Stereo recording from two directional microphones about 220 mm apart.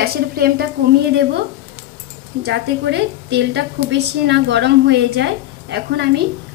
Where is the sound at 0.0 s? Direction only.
45° right (ahead or behind).